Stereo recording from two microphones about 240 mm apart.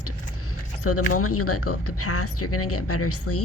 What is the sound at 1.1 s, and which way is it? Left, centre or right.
Speech, left.